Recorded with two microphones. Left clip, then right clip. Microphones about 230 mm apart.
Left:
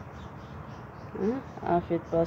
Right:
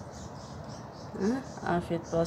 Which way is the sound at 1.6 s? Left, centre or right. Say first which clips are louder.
Left 5 dB; centre.